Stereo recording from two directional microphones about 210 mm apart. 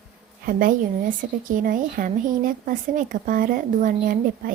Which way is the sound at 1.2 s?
40° right (ahead or behind).